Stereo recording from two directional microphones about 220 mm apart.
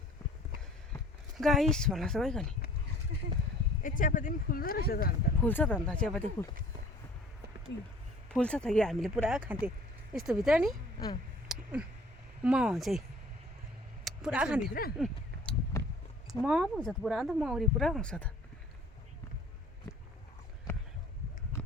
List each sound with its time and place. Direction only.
1.4 s speech: centre (ahead or behind)
3.8 s speech: 35° left (ahead or behind)
5.5 s speech: 10° left (ahead or behind)
8.3 s speech: 5° left (ahead or behind)
11.4 s a sound: 5° right (ahead or behind)
12.4 s speech: 5° right (ahead or behind)
14.7 s speech: 40° left (ahead or behind)
14.9 s a sound: centre (ahead or behind)
15.7 s a sound: 15° left (ahead or behind)
16.4 s speech: centre (ahead or behind)